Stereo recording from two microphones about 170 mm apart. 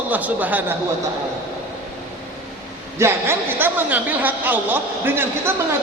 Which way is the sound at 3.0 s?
15° right (ahead or behind).